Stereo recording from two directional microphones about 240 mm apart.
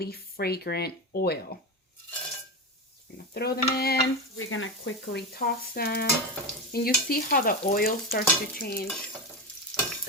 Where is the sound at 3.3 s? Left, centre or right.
Left.